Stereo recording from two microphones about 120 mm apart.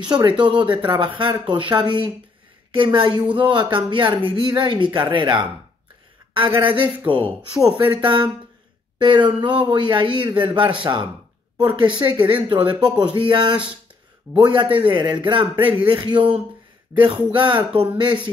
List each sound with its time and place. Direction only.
0.0 s speech: 40° right (ahead or behind)